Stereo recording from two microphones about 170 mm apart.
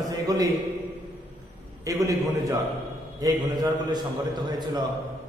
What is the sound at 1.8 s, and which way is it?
A man's voice, 20° right (ahead or behind).